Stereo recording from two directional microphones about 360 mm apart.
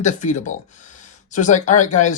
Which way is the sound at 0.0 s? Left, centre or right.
Centre.